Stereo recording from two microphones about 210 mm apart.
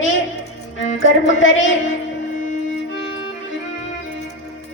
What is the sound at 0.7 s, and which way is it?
A woman's voice, 65° left (ahead or behind).